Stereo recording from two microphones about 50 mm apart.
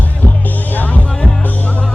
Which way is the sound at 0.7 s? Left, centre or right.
Left.